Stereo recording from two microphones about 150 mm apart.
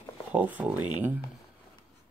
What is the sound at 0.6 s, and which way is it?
Speech, 10° right (ahead or behind).